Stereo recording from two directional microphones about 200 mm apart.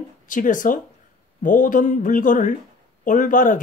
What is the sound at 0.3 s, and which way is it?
Speech, 40° left (ahead or behind).